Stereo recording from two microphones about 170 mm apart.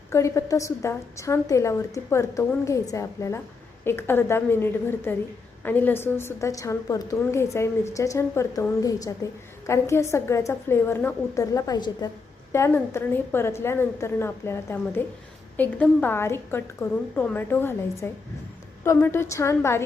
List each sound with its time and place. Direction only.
0.1 s a woman's voice: 15° left (ahead or behind)